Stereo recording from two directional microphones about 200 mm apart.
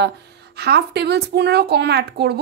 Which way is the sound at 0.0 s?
55° right (ahead or behind).